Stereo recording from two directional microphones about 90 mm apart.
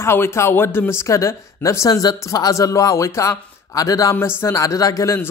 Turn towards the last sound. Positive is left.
turn(degrees=40)  # may be behind; listen again after turning